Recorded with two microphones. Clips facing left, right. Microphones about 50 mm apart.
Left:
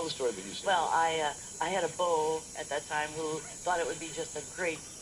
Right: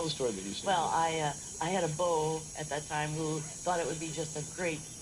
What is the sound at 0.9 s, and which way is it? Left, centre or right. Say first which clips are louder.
Speech: left 2 dB; left.